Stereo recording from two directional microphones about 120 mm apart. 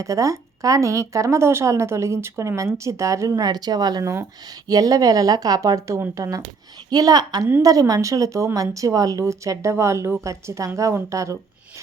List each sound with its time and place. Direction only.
0.0 s a woman's voice: 25° right (ahead or behind)